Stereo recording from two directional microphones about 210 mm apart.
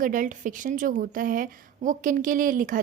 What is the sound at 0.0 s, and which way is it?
A woman's voice, 40° right (ahead or behind).